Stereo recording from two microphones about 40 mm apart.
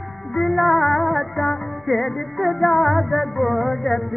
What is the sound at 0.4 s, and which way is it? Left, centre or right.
Music, centre.